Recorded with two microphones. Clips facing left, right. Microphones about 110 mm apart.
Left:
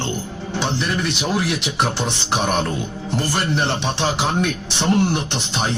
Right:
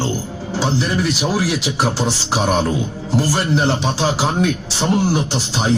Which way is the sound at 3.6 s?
Centre (ahead or behind).